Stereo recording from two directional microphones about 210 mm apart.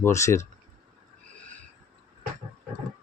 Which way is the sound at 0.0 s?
15° left (ahead or behind).